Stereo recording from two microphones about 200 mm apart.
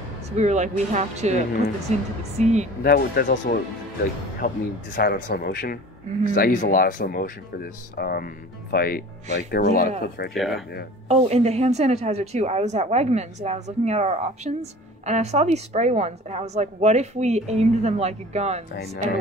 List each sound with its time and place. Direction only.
0.4 s a woman's voice: 35° right (ahead or behind)
2.8 s speech: 50° left (ahead or behind)
10.3 s speech: centre (ahead or behind)
11.1 s a woman's voice: 35° right (ahead or behind)